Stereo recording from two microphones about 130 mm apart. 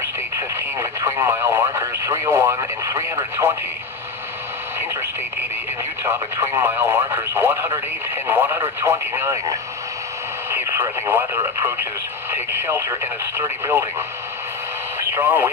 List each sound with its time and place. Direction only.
0.0 s speech: 20° right (ahead or behind)
6.1 s speech: 20° right (ahead or behind)
15.1 s speech: 15° right (ahead or behind)